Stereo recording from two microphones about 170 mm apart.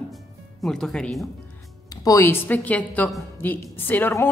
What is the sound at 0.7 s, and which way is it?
Speech, 5° left (ahead or behind).